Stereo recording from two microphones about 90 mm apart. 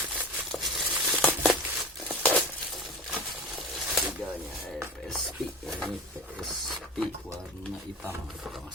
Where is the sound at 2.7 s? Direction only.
Centre (ahead or behind).